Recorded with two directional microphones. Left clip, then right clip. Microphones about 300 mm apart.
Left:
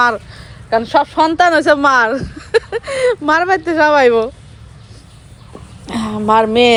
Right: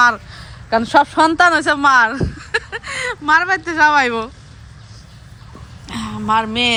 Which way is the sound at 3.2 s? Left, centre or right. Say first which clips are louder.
Left 1 dB; centre.